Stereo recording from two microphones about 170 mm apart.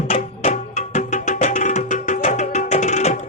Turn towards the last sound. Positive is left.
turn(degrees=45)  # may be behind; listen again after turning